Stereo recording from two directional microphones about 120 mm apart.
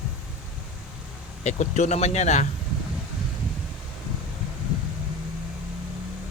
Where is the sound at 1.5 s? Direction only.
70° left (ahead or behind).